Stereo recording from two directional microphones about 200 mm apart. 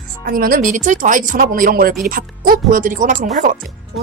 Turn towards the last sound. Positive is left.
turn(degrees=-40)  # may be behind; listen again after turning